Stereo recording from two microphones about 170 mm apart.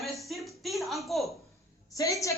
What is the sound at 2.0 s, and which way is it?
Speech, 20° left (ahead or behind).